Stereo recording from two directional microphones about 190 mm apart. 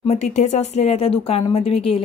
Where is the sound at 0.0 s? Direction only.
35° left (ahead or behind).